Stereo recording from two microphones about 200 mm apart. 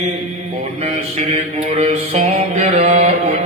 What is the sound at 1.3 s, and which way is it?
Mantra, 35° right (ahead or behind).